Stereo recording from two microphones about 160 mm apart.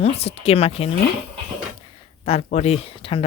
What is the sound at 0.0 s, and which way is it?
Speech, 40° left (ahead or behind).